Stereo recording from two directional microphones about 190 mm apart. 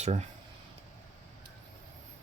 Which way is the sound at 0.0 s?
35° right (ahead or behind).